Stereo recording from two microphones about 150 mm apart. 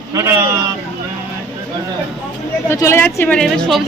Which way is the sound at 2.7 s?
20° left (ahead or behind).